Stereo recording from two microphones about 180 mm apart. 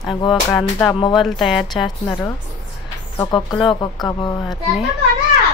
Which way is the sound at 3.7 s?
25° left (ahead or behind).